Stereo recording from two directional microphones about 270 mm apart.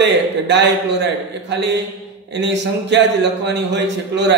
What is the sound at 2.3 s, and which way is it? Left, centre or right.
A man's voice, right.